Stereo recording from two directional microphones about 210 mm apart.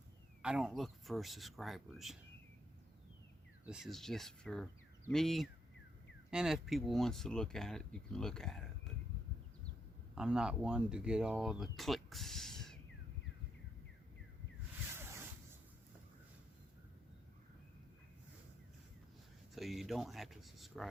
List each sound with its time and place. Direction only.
0.4 s speech: 5° right (ahead or behind)
3.7 s speech: centre (ahead or behind)
10.2 s speech: 5° right (ahead or behind)
14.9 s zipper: 10° right (ahead or behind)
19.5 s speech: centre (ahead or behind)